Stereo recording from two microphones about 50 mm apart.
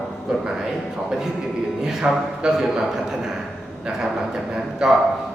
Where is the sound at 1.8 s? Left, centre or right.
Centre.